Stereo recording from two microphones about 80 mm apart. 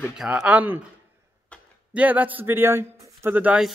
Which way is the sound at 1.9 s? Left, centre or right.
Centre.